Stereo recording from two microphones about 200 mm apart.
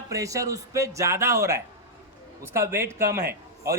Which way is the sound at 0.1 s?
15° right (ahead or behind).